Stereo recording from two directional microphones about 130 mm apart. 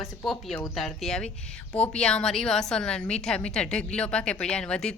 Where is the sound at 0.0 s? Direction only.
Centre (ahead or behind).